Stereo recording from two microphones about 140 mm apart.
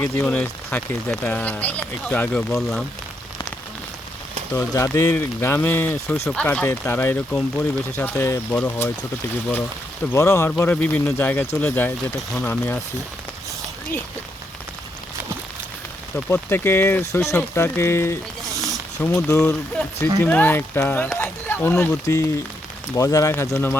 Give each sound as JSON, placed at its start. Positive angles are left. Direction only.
{"t": 0.0, "sound": "speech", "side_deg": 15}
{"t": 2.6, "sound": "speech", "side_deg": 0}
{"t": 4.5, "sound": "speech", "side_deg": 25}
{"t": 16.1, "sound": "speech", "side_deg": 15}